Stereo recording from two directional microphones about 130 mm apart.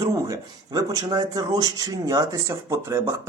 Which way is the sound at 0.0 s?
30° right (ahead or behind).